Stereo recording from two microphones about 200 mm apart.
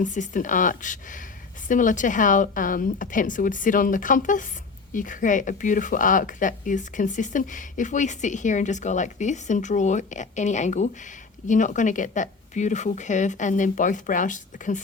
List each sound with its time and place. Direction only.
0.0 s speech: 40° left (ahead or behind)